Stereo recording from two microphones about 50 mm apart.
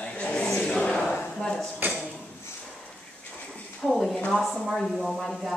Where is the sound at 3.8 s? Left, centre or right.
Centre.